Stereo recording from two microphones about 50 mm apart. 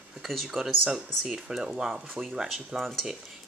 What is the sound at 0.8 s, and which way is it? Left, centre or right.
Speech, centre.